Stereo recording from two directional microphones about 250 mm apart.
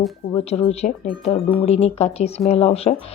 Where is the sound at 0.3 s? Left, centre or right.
Left.